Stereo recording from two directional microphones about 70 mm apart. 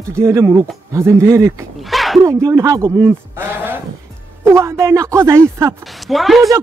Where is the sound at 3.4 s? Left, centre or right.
Right.